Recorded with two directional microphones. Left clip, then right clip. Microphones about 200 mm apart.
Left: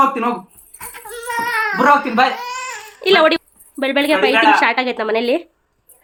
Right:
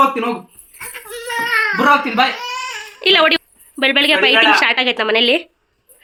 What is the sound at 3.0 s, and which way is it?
A woman's voice, centre (ahead or behind).